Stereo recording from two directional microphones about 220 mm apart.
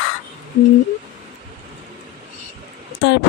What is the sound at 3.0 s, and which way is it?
Speech, 50° left (ahead or behind).